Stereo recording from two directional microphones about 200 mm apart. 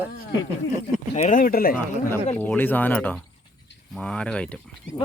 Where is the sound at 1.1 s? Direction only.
35° left (ahead or behind).